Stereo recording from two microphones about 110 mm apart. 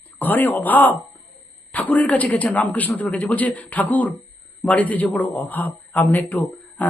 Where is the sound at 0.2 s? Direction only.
15° left (ahead or behind).